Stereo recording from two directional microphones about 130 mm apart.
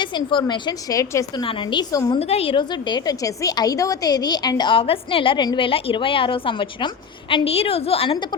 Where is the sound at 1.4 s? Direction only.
40° left (ahead or behind).